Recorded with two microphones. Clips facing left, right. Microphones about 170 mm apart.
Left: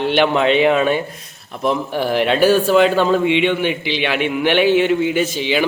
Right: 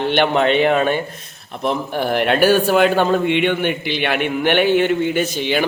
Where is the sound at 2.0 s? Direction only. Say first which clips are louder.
Left 1 dB; 55° right (ahead or behind).